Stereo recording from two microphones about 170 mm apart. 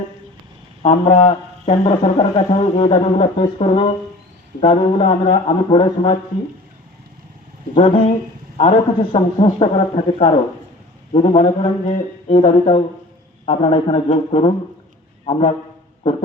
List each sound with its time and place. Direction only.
0.8 s speech: 40° left (ahead or behind)
7.8 s speech: 35° left (ahead or behind)
9.1 s speech: 35° left (ahead or behind)